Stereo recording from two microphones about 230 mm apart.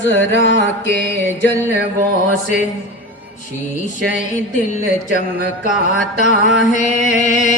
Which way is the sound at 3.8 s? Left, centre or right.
Left.